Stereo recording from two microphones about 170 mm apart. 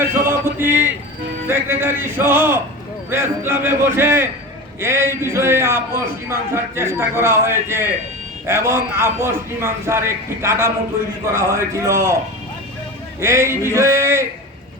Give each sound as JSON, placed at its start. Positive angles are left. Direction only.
{"t": 0.0, "sound": "a sound", "side_deg": -15}
{"t": 1.5, "sound": "a man's voice", "side_deg": -15}
{"t": 13.1, "sound": "a man's voice", "side_deg": -15}